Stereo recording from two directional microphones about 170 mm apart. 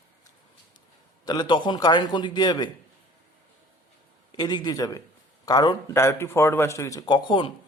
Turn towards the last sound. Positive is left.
turn(degrees=25)  # may be behind; listen again after turning